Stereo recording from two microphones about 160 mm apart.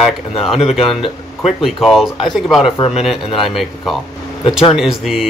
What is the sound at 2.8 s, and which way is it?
Speech, 40° left (ahead or behind).